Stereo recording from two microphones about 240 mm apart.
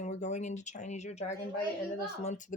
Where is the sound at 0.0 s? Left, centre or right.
Left.